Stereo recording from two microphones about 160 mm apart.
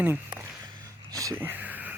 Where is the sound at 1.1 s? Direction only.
20° right (ahead or behind).